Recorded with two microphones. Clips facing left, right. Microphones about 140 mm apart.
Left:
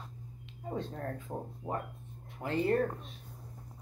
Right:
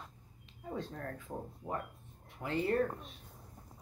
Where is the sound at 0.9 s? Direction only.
35° left (ahead or behind).